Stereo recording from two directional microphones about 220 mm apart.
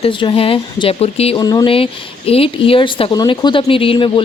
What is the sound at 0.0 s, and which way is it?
Speech, 20° left (ahead or behind).